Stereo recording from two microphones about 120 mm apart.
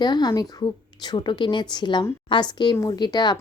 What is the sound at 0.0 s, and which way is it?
A woman's voice, 35° left (ahead or behind).